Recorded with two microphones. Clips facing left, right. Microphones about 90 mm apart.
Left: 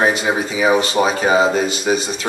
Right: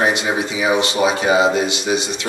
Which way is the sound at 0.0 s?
40° left (ahead or behind).